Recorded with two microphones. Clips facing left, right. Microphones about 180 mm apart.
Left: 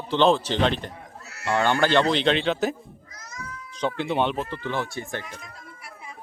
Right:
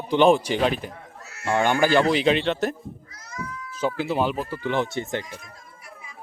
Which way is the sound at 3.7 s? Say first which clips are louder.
Right 1 dB; 5° right (ahead or behind).